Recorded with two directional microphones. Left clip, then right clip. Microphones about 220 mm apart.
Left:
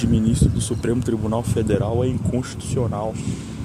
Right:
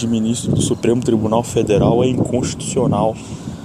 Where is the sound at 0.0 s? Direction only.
20° right (ahead or behind).